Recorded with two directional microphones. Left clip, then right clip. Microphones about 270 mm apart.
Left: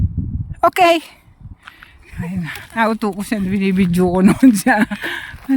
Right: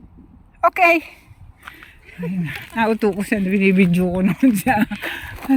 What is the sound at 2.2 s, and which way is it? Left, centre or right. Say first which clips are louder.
Speech: even; centre.